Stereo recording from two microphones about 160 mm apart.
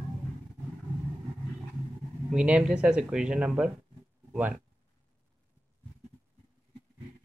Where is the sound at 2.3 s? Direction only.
5° right (ahead or behind).